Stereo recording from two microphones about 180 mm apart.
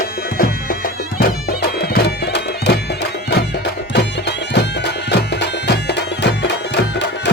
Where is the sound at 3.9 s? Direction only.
70° left (ahead or behind).